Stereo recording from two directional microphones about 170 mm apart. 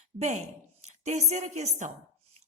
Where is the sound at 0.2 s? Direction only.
40° right (ahead or behind).